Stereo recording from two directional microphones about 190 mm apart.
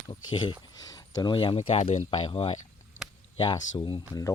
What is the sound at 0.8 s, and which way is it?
Speech, 20° left (ahead or behind).